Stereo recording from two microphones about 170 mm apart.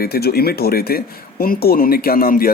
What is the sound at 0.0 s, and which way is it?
Speech, 65° left (ahead or behind).